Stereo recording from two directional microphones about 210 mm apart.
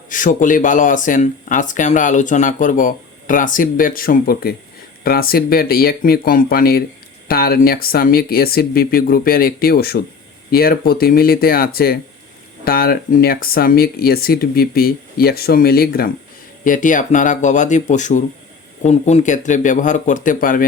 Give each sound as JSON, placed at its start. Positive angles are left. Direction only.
{"t": 0.1, "sound": "speech", "side_deg": 40}